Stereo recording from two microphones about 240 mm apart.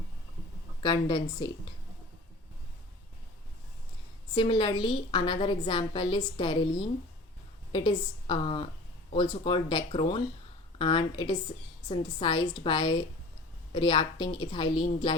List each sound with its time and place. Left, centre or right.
0.8 s a woman's voice: centre
4.4 s a woman's voice: centre
7.7 s a woman's voice: centre